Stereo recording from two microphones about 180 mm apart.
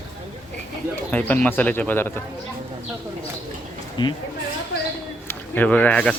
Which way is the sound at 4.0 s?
25° left (ahead or behind).